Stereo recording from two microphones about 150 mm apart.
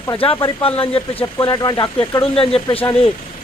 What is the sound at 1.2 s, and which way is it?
A man's voice, 25° left (ahead or behind).